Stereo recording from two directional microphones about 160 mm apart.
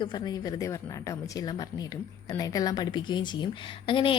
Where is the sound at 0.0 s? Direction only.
25° left (ahead or behind).